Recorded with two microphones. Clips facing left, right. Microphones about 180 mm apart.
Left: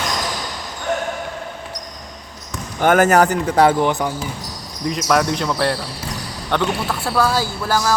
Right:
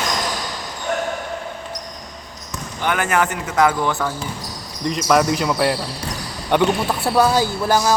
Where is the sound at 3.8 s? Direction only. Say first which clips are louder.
Left 3 dB; 20° left (ahead or behind).